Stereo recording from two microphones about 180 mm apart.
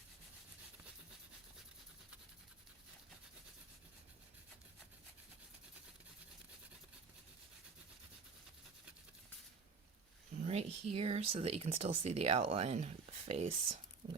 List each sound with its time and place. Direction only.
10.4 s speech: 35° right (ahead or behind)